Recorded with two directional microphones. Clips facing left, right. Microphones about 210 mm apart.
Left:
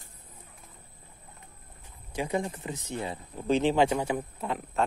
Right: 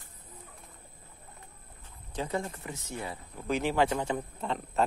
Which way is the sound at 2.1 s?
15° left (ahead or behind).